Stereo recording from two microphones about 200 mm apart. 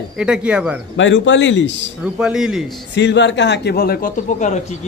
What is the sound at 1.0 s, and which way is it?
Speech, 70° left (ahead or behind).